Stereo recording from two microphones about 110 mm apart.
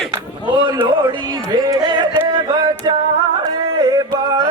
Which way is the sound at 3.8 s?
35° right (ahead or behind).